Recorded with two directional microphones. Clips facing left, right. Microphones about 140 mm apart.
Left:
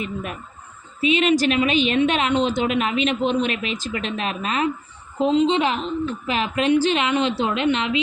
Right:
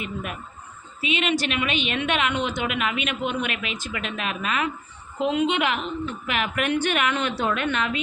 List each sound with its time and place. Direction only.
0.0 s a woman's voice: 35° left (ahead or behind)